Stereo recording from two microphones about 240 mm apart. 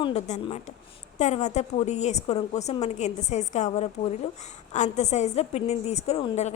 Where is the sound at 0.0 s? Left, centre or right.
Left.